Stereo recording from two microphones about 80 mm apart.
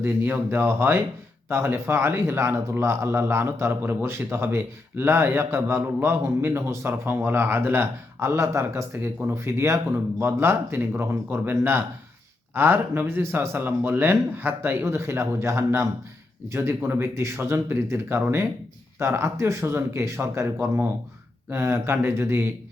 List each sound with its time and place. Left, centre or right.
0.0 s a man's voice: right